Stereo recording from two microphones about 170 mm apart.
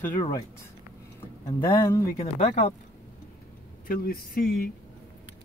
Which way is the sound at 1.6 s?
15° left (ahead or behind).